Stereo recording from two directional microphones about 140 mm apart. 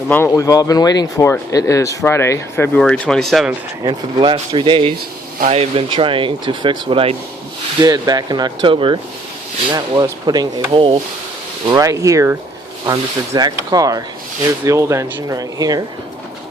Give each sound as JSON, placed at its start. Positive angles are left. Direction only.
{"t": 0.1, "sound": "speech", "side_deg": 20}
{"t": 2.7, "sound": "speech", "side_deg": 5}
{"t": 3.8, "sound": "speech", "side_deg": -35}
{"t": 7.8, "sound": "speech", "side_deg": -30}
{"t": 11.7, "sound": "speech", "side_deg": -25}